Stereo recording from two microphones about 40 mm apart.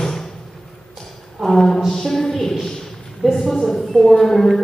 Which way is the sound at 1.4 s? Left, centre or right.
Centre.